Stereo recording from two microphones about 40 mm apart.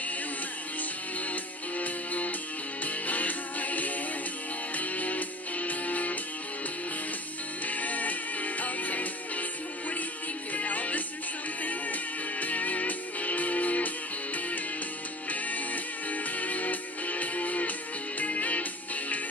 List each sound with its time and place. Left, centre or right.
1.2 s music: left
7.6 s music: left